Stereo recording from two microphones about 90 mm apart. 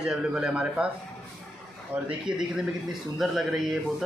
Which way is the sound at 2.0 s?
5° right (ahead or behind).